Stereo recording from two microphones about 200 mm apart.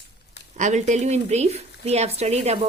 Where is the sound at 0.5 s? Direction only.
35° right (ahead or behind).